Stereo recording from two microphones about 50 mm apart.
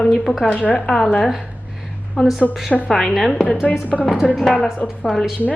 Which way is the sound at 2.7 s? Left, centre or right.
Centre.